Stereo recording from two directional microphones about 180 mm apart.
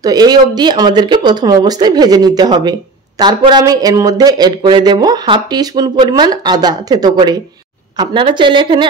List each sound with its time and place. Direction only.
0.0 s speech: 20° right (ahead or behind)